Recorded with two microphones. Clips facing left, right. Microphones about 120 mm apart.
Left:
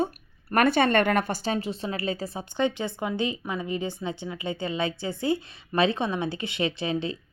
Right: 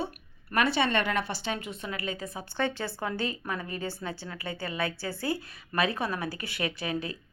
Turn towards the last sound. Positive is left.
turn(degrees=25)  # may be behind; listen again after turning